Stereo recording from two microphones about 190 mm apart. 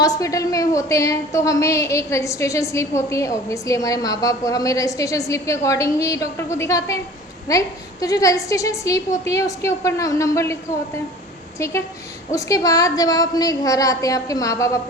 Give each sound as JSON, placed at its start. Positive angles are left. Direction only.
{"t": 0.0, "sound": "a woman's voice", "side_deg": 20}
{"t": 12.3, "sound": "a woman's voice", "side_deg": 15}